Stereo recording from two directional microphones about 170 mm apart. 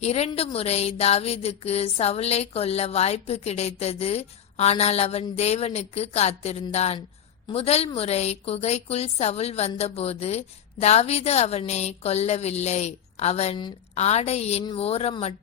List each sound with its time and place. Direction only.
0.0 s speech: 40° left (ahead or behind)